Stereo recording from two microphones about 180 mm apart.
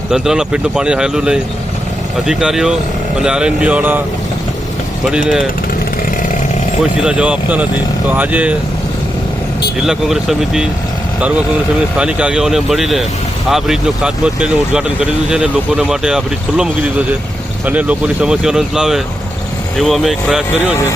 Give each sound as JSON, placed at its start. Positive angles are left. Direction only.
{"t": 0.1, "sound": "speech", "side_deg": -5}
{"t": 5.0, "sound": "speech", "side_deg": 0}
{"t": 7.0, "sound": "speech", "side_deg": -5}
{"t": 9.8, "sound": "speech", "side_deg": 0}